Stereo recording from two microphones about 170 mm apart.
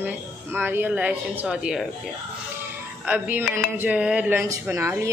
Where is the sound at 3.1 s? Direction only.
10° right (ahead or behind).